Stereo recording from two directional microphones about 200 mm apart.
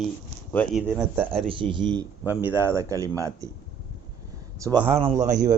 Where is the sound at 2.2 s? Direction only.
10° right (ahead or behind).